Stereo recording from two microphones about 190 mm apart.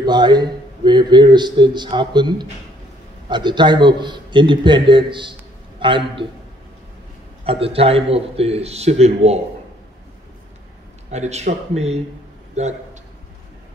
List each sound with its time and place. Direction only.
0.0 s speech: 20° right (ahead or behind)
7.4 s a man's voice: 30° right (ahead or behind)
11.1 s a man's voice: 35° right (ahead or behind)